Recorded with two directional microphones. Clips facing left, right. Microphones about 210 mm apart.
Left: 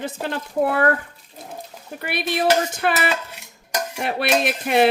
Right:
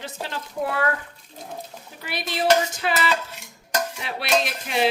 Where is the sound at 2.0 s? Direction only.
60° left (ahead or behind).